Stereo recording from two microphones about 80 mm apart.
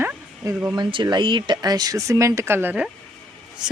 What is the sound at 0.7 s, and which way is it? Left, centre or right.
Speech, right.